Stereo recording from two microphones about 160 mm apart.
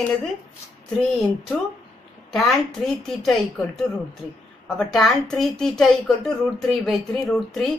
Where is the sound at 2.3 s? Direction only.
Centre (ahead or behind).